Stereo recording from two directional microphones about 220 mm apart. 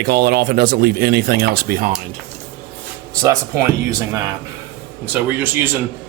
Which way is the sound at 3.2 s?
15° right (ahead or behind).